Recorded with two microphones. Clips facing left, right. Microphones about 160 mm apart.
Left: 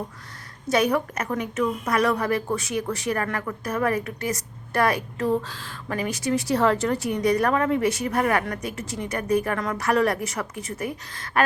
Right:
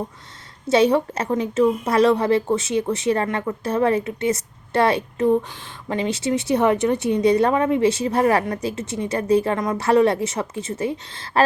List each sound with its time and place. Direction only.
0.7 s a woman's voice: 25° right (ahead or behind)